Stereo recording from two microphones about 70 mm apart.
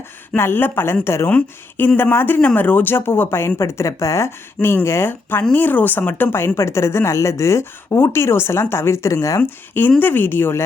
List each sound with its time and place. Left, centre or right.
0.3 s speech: left
1.3 s a woman's voice: left
5.4 s speech: left
9.4 s a woman's voice: left